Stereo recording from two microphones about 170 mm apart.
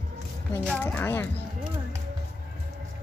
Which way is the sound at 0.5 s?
10° left (ahead or behind).